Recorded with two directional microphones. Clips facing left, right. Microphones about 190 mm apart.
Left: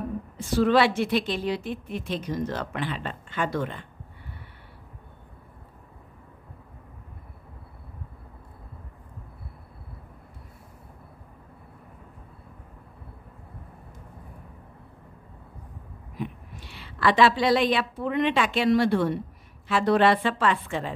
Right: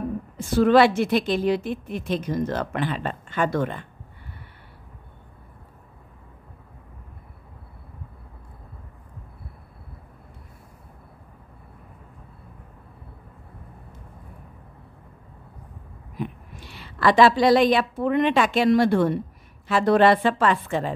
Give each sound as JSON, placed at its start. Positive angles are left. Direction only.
{"t": 0.4, "sound": "a woman's voice", "side_deg": -50}
{"t": 16.2, "sound": "a woman's voice", "side_deg": -45}